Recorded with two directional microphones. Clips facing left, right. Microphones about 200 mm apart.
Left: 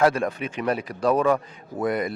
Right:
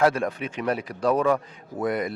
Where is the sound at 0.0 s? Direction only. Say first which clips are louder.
Left 1 dB; 15° left (ahead or behind).